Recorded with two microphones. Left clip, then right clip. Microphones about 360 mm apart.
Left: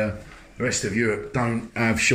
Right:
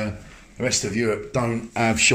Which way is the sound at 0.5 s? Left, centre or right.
Centre.